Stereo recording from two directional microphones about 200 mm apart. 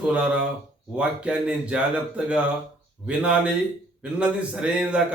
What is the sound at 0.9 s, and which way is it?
A man's voice, 5° right (ahead or behind).